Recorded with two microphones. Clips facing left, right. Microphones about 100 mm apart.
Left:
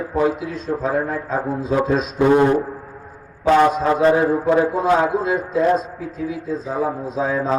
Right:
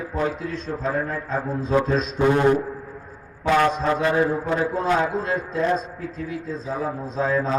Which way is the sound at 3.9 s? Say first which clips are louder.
Left 6 dB; 30° left (ahead or behind).